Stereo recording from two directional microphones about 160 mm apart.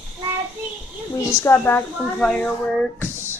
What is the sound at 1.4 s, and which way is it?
Speech, 10° left (ahead or behind).